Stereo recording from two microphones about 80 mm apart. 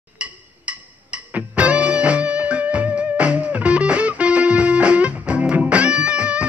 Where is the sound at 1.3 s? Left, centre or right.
Centre.